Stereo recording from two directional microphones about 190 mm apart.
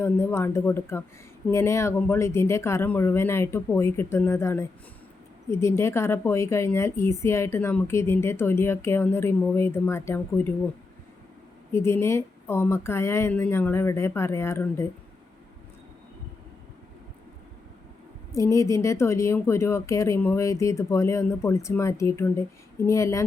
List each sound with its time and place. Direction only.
0.0 s a woman's voice: 10° left (ahead or behind)
11.7 s a woman's voice: 15° left (ahead or behind)
18.3 s a woman's voice: 15° left (ahead or behind)